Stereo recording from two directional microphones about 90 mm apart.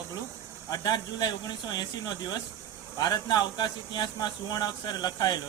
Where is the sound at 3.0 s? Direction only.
50° left (ahead or behind).